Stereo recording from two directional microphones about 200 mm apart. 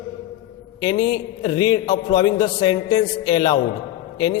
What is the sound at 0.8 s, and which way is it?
A man's voice, 20° left (ahead or behind).